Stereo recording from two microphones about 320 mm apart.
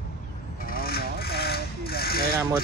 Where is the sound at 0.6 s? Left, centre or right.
Left.